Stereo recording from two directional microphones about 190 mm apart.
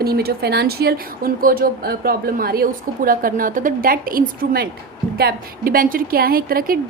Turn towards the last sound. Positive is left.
turn(degrees=-50)  # may be behind; listen again after turning